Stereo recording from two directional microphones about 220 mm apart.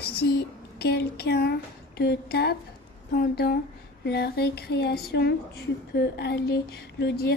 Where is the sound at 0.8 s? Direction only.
50° left (ahead or behind).